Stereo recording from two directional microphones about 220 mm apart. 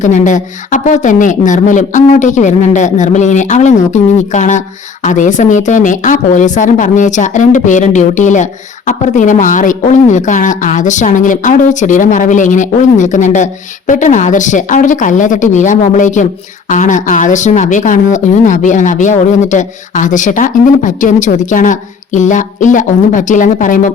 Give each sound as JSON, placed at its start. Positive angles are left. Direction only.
{"t": 0.0, "sound": "a woman's voice", "side_deg": 35}